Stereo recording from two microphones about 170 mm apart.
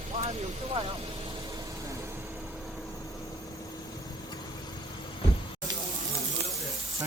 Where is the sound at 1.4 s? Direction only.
20° right (ahead or behind).